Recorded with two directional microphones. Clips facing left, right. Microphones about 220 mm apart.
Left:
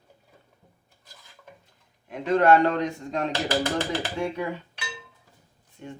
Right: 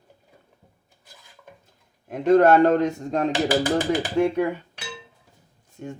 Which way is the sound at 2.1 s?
45° right (ahead or behind).